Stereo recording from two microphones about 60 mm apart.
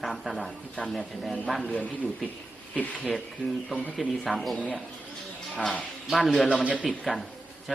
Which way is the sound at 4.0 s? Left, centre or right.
Centre.